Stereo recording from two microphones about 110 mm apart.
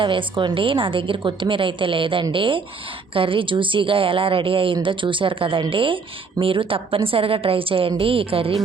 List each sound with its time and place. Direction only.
0.0 s a woman's voice: 50° right (ahead or behind)